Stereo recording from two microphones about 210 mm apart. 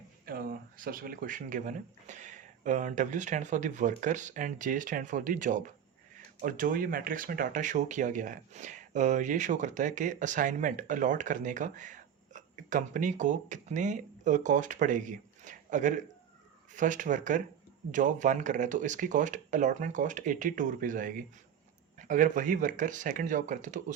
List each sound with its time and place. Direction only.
0.3 s speech: 45° right (ahead or behind)